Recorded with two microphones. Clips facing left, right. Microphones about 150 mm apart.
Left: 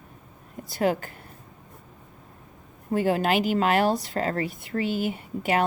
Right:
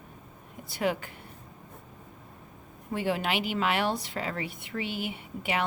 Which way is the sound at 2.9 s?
45° left (ahead or behind).